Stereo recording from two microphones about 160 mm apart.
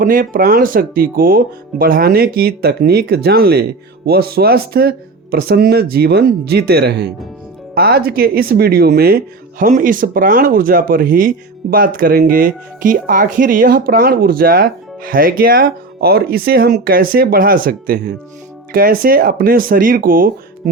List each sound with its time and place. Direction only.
0.0 s speech: 60° right (ahead or behind); by 7.1 s 90° right
7.8 s speech: 75° right (ahead or behind)